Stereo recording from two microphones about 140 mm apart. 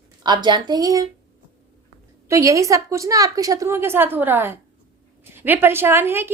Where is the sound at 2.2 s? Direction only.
20° right (ahead or behind).